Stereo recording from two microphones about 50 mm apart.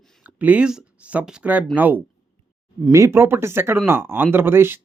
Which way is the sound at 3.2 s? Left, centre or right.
Right.